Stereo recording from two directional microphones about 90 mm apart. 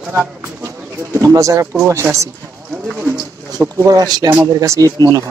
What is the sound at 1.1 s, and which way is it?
Speech, 35° right (ahead or behind).